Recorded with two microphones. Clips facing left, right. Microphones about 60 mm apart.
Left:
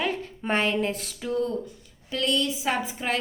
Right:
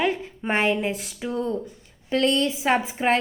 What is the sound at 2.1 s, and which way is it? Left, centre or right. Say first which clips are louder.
A woman's voice: right 5 dB; right.